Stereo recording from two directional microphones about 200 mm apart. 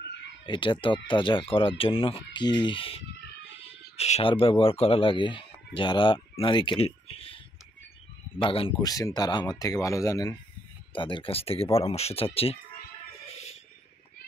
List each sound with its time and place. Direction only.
0.5 s speech: 25° left (ahead or behind)